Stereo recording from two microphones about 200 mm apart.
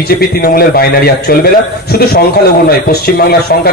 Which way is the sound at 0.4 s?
50° left (ahead or behind).